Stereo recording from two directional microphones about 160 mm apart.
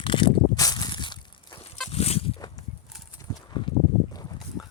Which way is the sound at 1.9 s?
40° left (ahead or behind).